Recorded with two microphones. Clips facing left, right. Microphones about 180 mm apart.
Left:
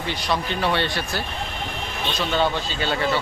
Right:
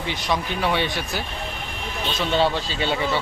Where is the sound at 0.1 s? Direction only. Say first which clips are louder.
Even; 15° right (ahead or behind).